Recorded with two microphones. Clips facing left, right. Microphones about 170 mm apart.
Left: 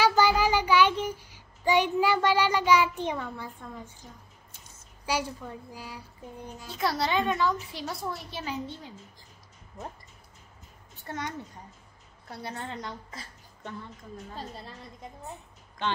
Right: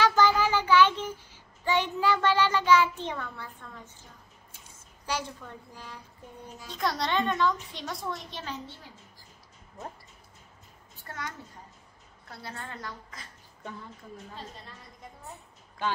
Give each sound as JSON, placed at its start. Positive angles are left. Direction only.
{"t": 0.0, "sound": "child singing", "side_deg": 10}
{"t": 5.0, "sound": "a woman's voice", "side_deg": 10}
{"t": 11.1, "sound": "a woman's voice", "side_deg": 20}
{"t": 14.3, "sound": "a woman's voice", "side_deg": 35}